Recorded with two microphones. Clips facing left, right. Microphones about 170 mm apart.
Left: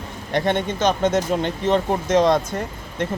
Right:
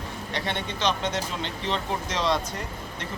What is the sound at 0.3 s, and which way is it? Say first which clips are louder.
Speech: left 11 dB; 50° left (ahead or behind).